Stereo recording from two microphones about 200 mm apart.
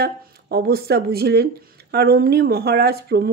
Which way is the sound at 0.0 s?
50° right (ahead or behind).